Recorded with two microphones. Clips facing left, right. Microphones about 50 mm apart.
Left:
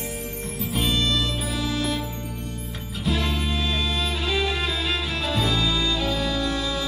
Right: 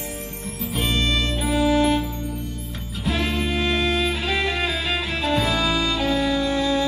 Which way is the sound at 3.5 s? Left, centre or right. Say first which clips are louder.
Right 5 dB; right.